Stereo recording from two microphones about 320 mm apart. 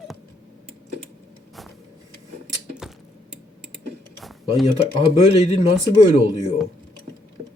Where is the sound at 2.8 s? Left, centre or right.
Centre.